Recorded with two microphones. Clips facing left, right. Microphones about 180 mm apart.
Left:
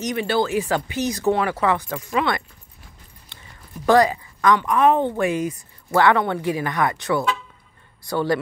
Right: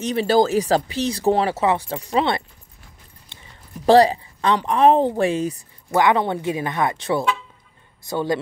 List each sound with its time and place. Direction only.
0.0 s speech: 30° right (ahead or behind)
3.3 s a sound: 25° right (ahead or behind)
3.8 s speech: 30° right (ahead or behind)
5.9 s speech: 20° right (ahead or behind)